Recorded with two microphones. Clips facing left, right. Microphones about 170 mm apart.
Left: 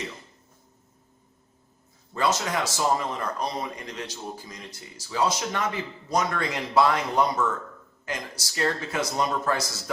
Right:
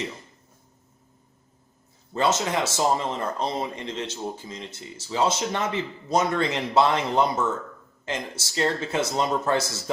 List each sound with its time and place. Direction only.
2.1 s speech: 25° right (ahead or behind)